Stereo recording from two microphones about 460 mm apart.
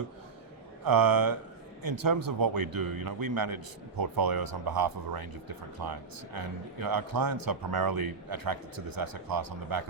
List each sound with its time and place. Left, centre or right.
0.9 s speech: right